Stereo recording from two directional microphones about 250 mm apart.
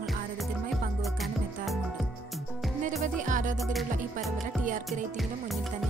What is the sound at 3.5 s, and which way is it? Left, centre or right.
Music, centre.